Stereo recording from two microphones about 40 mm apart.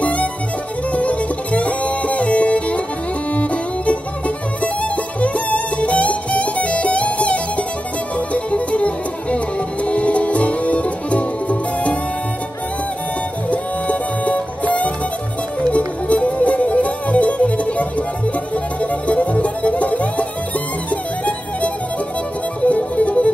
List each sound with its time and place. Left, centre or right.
0.0 s music: left
13.5 s music: left
22.7 s music: left